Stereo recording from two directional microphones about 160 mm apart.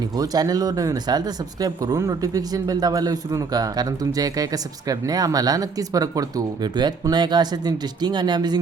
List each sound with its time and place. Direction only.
0.2 s speech: 25° right (ahead or behind)